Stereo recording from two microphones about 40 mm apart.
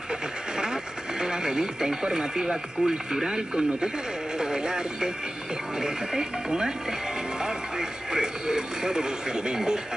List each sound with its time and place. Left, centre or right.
1.2 s speech: centre
4.4 s a sound: centre
5.8 s speech: centre
8.1 s speech: centre